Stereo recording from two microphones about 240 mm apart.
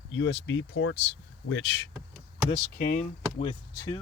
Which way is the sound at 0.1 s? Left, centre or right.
Left.